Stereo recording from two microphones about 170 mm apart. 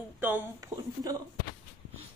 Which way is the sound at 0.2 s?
10° right (ahead or behind).